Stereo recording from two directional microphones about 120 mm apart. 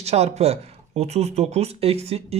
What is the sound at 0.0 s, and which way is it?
Speech, 60° right (ahead or behind).